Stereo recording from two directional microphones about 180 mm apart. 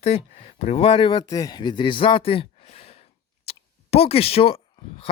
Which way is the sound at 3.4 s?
35° left (ahead or behind).